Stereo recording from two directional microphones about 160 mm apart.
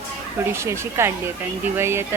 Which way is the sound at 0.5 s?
15° right (ahead or behind).